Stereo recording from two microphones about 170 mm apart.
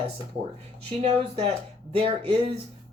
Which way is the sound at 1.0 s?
35° right (ahead or behind).